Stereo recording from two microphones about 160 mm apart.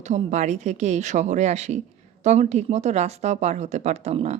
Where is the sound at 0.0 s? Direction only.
45° right (ahead or behind).